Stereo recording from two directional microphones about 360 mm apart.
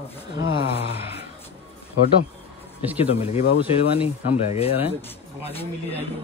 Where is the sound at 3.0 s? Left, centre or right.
Centre.